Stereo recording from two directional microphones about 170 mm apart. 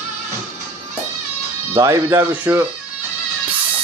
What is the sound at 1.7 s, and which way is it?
Speech, 15° right (ahead or behind).